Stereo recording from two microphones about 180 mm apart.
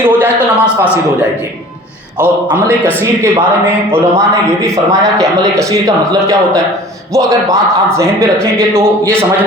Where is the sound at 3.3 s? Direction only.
10° right (ahead or behind).